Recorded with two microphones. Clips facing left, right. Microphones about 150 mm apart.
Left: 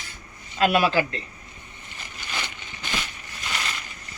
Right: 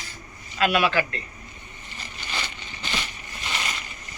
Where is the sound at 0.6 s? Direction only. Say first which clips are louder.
Left 2 dB; 35° left (ahead or behind).